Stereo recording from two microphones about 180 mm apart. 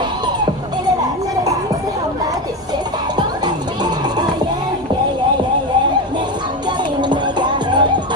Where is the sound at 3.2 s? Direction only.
25° right (ahead or behind).